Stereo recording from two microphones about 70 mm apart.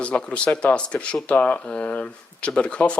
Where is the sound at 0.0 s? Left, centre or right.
Centre.